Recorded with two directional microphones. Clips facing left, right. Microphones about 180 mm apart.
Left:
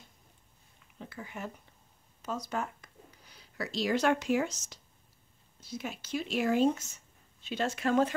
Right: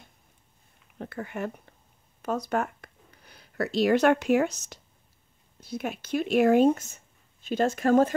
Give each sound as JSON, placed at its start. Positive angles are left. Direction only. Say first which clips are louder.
{"t": 0.9, "sound": "speech", "louder": "right 8 dB", "side_deg": -60}